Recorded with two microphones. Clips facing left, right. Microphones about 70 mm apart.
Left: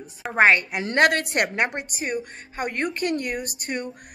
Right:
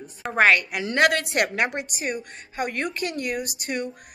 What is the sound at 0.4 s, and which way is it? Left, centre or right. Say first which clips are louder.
Speech: left 1 dB; left.